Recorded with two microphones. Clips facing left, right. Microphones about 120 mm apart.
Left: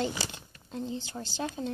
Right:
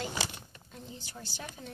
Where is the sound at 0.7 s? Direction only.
30° left (ahead or behind).